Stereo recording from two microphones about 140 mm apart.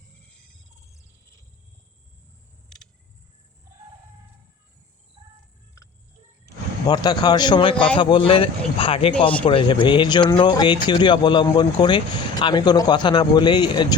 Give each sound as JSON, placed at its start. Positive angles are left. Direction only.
{"t": 6.4, "sound": "speech", "side_deg": 30}